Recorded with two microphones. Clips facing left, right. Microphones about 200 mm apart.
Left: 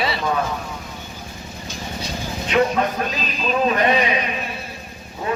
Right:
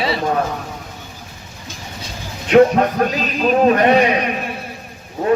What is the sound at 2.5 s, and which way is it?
A man's voice, 55° right (ahead or behind).